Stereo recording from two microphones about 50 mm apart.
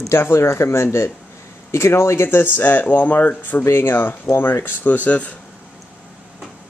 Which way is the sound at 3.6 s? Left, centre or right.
Left.